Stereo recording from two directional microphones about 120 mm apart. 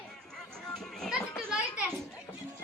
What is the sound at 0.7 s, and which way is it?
Children playing, 5° left (ahead or behind).